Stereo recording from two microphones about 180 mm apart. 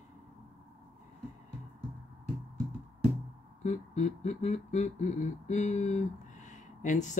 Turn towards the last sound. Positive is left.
turn(degrees=45)  # may be behind; listen again after turning